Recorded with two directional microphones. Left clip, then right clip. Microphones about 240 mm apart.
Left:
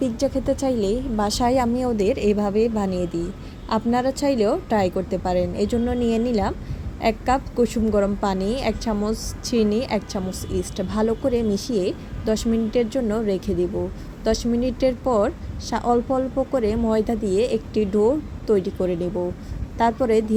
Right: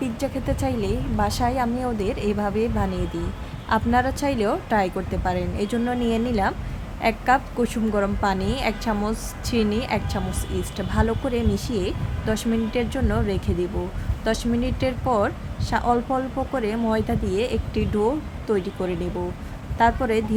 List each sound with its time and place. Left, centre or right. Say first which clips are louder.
0.0 s a woman's voice: left 4 dB; centre